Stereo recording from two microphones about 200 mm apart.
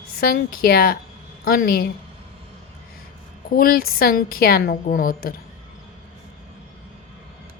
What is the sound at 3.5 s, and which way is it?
A woman's voice, 50° left (ahead or behind).